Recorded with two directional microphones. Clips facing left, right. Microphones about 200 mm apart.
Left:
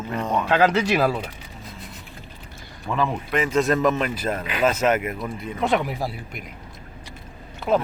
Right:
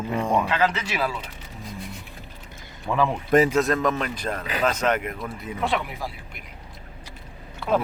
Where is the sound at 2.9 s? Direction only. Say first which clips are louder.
Right 4 dB; 5° right (ahead or behind).